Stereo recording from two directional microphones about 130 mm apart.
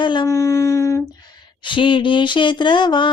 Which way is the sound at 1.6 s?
40° left (ahead or behind).